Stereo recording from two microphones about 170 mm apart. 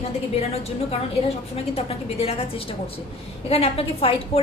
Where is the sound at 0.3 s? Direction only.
35° left (ahead or behind).